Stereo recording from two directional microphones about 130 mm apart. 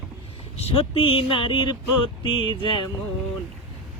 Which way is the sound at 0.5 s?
50° left (ahead or behind).